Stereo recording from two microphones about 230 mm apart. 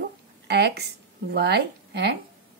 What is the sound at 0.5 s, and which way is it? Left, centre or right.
A woman's voice, right.